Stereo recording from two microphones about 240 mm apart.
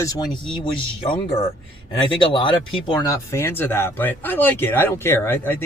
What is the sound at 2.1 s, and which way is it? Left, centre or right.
Speech, left.